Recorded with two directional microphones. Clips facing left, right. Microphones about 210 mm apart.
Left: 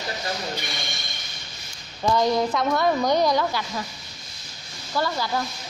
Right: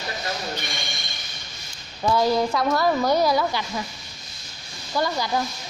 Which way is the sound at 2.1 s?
5° right (ahead or behind).